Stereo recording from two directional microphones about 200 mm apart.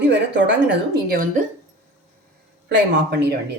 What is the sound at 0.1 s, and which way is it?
Speech, 60° right (ahead or behind).